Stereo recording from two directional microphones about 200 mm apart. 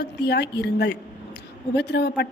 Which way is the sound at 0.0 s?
55° left (ahead or behind).